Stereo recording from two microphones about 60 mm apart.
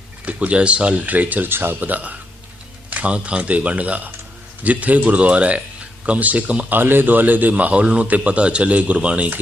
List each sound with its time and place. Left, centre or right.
0.3 s a man's voice: right
6.7 s a man's voice: right